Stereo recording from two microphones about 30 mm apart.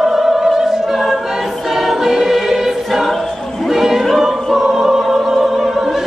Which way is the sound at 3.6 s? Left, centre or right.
Centre.